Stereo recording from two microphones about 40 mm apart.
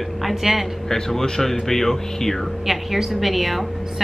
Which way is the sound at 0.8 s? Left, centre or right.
Centre.